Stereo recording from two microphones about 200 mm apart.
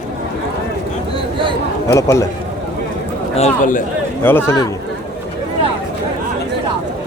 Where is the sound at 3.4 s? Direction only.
35° left (ahead or behind).